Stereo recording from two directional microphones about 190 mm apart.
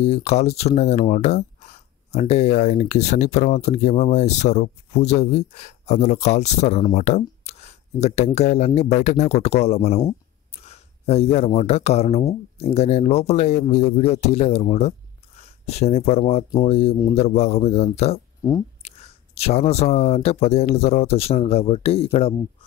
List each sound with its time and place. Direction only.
0.0 s speech: 35° left (ahead or behind)